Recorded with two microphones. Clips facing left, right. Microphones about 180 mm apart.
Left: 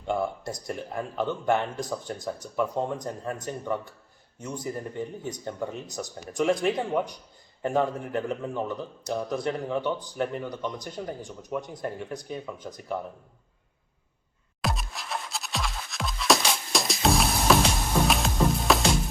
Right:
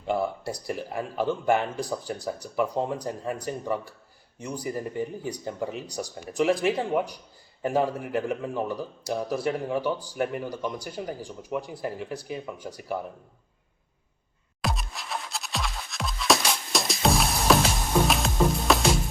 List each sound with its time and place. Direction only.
0.0 s a man's voice: 5° right (ahead or behind)
14.6 s music: centre (ahead or behind)